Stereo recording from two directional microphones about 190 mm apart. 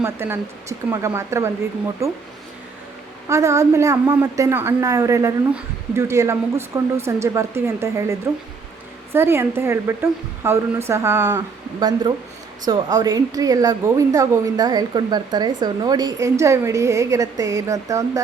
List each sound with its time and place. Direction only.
0.0 s a woman's voice: 15° right (ahead or behind)
3.2 s a woman's voice: 15° right (ahead or behind)
9.1 s a woman's voice: 10° right (ahead or behind)